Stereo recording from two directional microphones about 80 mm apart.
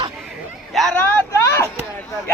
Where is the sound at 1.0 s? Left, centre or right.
Left.